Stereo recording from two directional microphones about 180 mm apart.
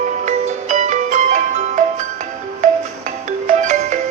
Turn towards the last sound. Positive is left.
turn(degrees=-40)  # may be behind; listen again after turning